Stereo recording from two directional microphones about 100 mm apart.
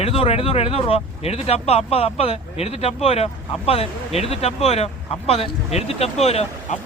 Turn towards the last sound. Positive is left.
turn(degrees=90)